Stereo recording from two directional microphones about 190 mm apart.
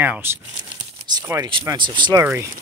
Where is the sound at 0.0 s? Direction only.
10° right (ahead or behind).